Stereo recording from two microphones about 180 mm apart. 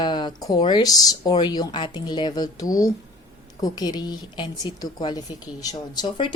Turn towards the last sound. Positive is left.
turn(degrees=25)  # may be behind; listen again after turning